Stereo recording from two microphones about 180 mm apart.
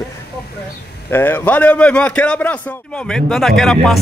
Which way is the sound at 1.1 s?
10° left (ahead or behind).